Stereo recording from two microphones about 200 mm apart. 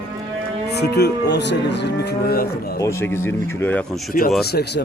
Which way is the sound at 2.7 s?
15° left (ahead or behind).